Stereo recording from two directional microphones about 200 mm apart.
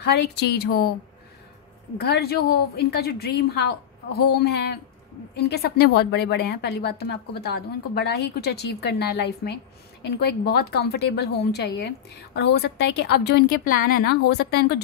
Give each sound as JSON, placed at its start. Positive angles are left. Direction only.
{"t": 0.0, "sound": "a woman's voice", "side_deg": 55}
{"t": 2.0, "sound": "a woman's voice", "side_deg": 55}